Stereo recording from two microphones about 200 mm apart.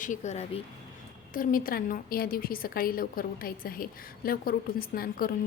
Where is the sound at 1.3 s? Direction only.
45° left (ahead or behind).